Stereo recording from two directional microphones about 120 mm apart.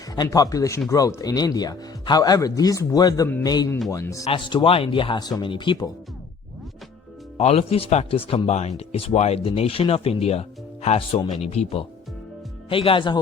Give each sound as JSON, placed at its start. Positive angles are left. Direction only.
{"t": 0.2, "sound": "speech", "side_deg": 30}
{"t": 4.4, "sound": "speech", "side_deg": 40}
{"t": 7.3, "sound": "speech", "side_deg": 60}
{"t": 11.4, "sound": "speech", "side_deg": 65}
{"t": 12.6, "sound": "speech", "side_deg": 50}